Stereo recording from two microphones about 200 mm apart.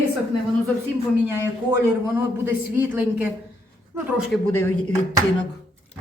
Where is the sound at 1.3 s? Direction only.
15° right (ahead or behind).